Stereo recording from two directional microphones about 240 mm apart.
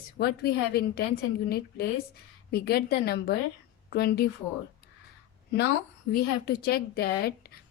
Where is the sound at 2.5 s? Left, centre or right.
Left.